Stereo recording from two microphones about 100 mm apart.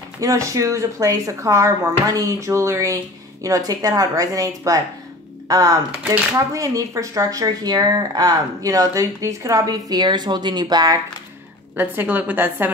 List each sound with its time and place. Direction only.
0.2 s speech: 35° right (ahead or behind)
11.7 s a woman's voice: 20° right (ahead or behind)